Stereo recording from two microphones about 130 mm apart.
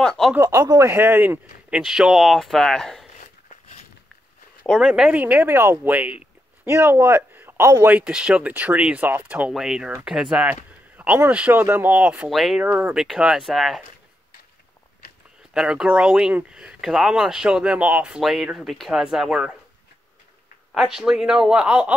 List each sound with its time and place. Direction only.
0.0 s speech: centre (ahead or behind)
0.3 s speech: 20° right (ahead or behind)
1.8 s speech: 5° right (ahead or behind)
4.7 s speech: 5° right (ahead or behind)
8.0 s speech: 5° right (ahead or behind)
12.6 s speech: 15° right (ahead or behind)
15.5 s speech: 5° right (ahead or behind)
20.7 s speech: 5° right (ahead or behind)